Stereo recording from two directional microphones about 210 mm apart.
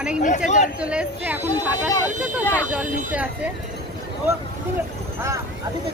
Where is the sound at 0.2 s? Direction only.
35° left (ahead or behind).